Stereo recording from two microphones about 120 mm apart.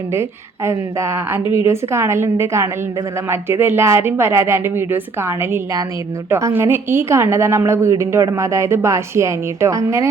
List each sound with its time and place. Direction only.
0.1 s a woman's voice: 20° right (ahead or behind)